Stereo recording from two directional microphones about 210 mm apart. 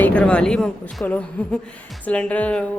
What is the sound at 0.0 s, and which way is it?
Speech, 5° left (ahead or behind).